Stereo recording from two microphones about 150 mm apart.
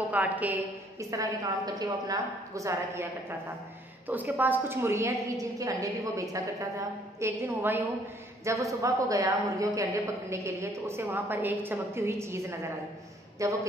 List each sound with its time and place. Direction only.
0.1 s a woman's voice: 10° right (ahead or behind)